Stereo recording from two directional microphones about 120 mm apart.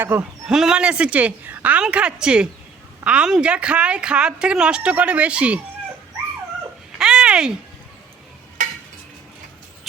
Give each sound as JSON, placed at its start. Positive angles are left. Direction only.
{"t": 0.0, "sound": "speech", "side_deg": -20}
{"t": 0.4, "sound": "speech", "side_deg": -5}
{"t": 7.0, "sound": "a sound", "side_deg": -5}